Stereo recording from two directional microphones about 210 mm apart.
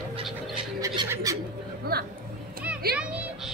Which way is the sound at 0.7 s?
15° right (ahead or behind).